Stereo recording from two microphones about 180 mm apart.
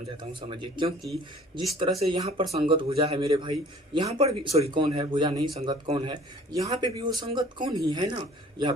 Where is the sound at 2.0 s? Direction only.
30° right (ahead or behind).